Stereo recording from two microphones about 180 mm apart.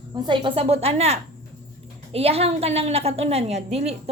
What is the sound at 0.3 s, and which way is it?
A woman's voice, 30° right (ahead or behind).